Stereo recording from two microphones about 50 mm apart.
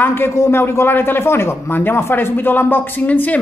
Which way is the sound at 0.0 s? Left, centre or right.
Left.